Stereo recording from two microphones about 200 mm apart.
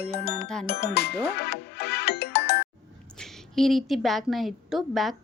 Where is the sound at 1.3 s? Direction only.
55° left (ahead or behind).